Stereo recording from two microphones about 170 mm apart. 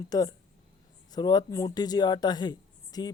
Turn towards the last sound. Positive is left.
turn(degrees=25)  # may be behind; listen again after turning